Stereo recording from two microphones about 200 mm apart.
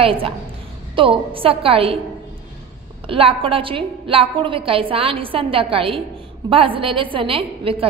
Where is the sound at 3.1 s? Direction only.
30° right (ahead or behind).